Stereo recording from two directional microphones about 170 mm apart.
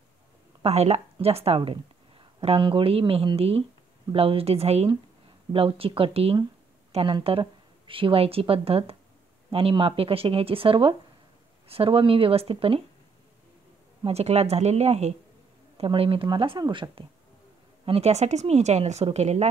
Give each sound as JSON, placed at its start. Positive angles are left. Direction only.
{"t": 0.6, "sound": "a woman's voice", "side_deg": -40}
{"t": 14.0, "sound": "a woman's voice", "side_deg": -40}
{"t": 17.8, "sound": "a woman's voice", "side_deg": -35}